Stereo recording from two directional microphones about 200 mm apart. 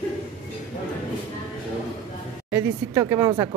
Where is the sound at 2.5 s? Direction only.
15° right (ahead or behind).